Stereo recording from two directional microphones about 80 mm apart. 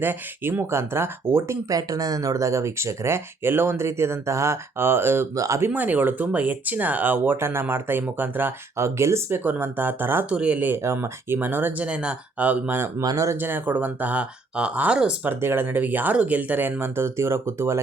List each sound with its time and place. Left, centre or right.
0.0 s speech: right
1.7 s speech: right
5.3 s speech: right
5.5 s speech: right
8.8 s speech: right
9.4 s speech: right
10.2 s speech: centre
10.8 s speech: right
11.9 s speech: centre
13.0 s speech: right
13.3 s speech: right
15.3 s speech: right